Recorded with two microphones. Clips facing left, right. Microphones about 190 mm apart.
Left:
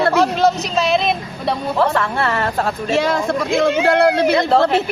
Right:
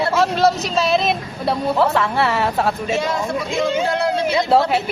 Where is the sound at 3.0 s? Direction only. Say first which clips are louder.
Left 4 dB; 65° left (ahead or behind).